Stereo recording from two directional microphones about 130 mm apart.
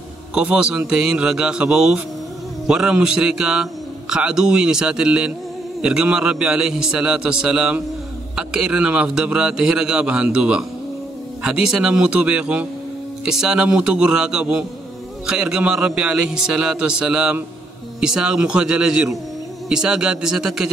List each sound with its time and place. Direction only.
0.3 s a man's voice: 10° right (ahead or behind)